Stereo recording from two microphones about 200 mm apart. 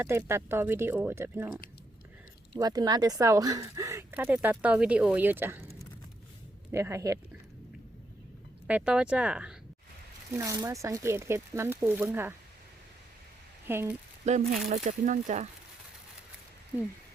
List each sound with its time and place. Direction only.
0.0 s speech: 15° right (ahead or behind)
6.7 s speech: 15° right (ahead or behind)
8.6 s speech: 5° right (ahead or behind)
10.3 s speech: 15° right (ahead or behind)
13.7 s speech: 10° right (ahead or behind)
14.3 s speech: 35° right (ahead or behind)